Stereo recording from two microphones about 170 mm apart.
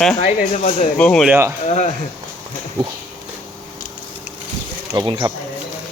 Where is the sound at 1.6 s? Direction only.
45° left (ahead or behind).